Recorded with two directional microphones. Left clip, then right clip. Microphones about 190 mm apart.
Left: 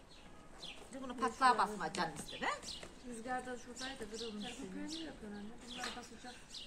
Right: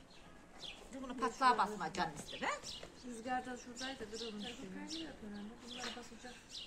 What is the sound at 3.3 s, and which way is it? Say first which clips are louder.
Speech: right 1 dB; 5° right (ahead or behind).